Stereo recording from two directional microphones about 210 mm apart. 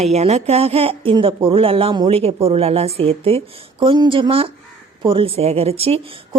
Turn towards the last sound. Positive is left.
turn(degrees=-25)  # may be behind; listen again after turning